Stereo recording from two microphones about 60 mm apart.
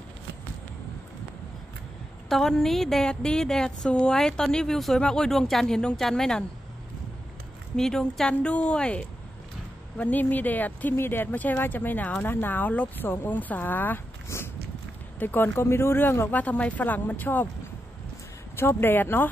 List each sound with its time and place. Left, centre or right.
2.2 s a woman's voice: centre
7.7 s speech: centre
9.9 s speech: left
14.3 s a sound: left
15.1 s speech: left
16.3 s speech: left
18.6 s speech: left